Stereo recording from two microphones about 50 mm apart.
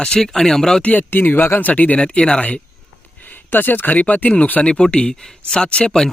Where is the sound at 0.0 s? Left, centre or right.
Centre.